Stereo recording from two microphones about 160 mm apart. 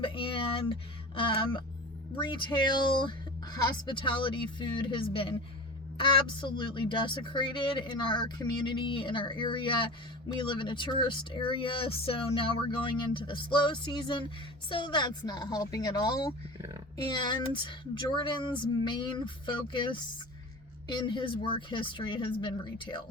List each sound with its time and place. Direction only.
0.0 s speech: 35° left (ahead or behind)
16.6 s a sound: 20° right (ahead or behind)
17.1 s speech: 30° left (ahead or behind)